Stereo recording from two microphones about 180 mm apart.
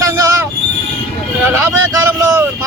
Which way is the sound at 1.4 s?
15° right (ahead or behind).